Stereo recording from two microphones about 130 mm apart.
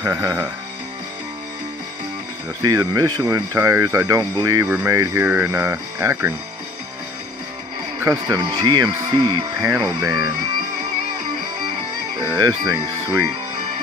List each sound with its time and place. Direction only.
0.1 s speech: 20° right (ahead or behind)
2.6 s speech: 25° right (ahead or behind)
8.0 s speech: 20° right (ahead or behind)
8.5 s speech: 35° right (ahead or behind)
12.3 s speech: 30° right (ahead or behind)